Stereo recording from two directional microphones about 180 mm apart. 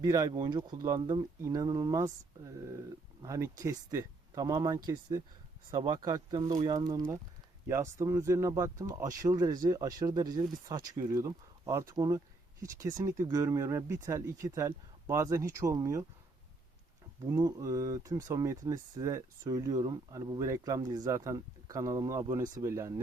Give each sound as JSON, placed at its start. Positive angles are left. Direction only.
{"t": 0.0, "sound": "speech", "side_deg": -20}
{"t": 17.2, "sound": "speech", "side_deg": -20}